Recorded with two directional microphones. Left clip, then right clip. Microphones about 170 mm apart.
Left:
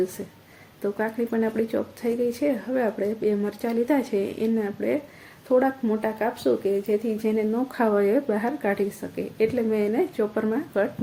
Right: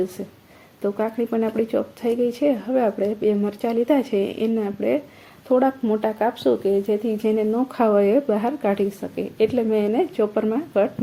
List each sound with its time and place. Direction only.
0.8 s speech: 15° right (ahead or behind)
7.5 s speech: 15° right (ahead or behind)